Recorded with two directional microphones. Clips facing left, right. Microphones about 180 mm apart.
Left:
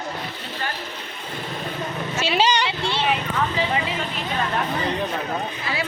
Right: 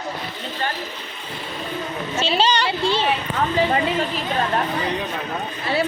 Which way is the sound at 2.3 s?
10° left (ahead or behind).